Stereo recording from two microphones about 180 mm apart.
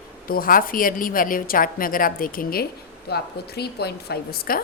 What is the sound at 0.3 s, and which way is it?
A woman's voice, 50° left (ahead or behind).